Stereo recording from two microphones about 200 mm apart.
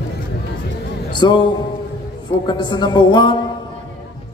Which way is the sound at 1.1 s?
20° left (ahead or behind).